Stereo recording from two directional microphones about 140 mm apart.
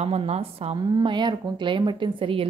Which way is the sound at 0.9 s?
35° right (ahead or behind).